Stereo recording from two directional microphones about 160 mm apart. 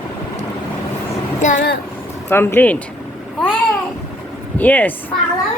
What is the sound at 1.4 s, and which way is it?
Speech, 50° left (ahead or behind).